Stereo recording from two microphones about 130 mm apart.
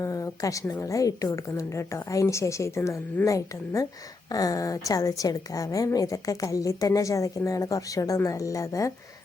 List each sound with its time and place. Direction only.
0.0 s a woman's voice: 25° left (ahead or behind)